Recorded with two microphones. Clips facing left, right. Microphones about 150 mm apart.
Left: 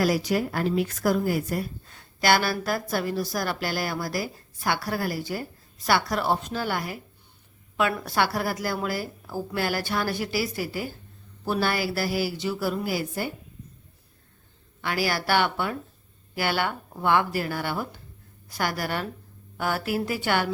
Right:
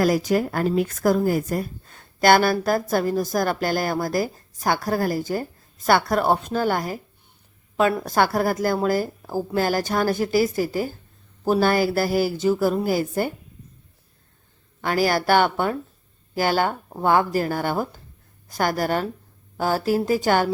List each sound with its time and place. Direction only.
0.0 s a woman's voice: 45° right (ahead or behind)
14.8 s a woman's voice: 45° right (ahead or behind)